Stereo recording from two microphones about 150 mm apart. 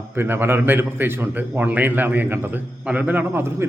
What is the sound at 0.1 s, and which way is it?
A man's voice, 15° right (ahead or behind).